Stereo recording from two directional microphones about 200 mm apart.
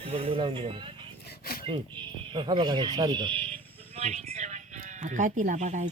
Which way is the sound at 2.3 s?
25° right (ahead or behind).